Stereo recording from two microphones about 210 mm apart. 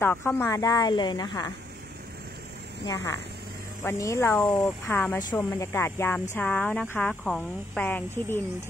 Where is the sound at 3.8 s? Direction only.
15° left (ahead or behind).